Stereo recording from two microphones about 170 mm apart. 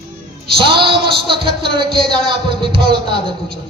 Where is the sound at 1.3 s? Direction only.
30° right (ahead or behind).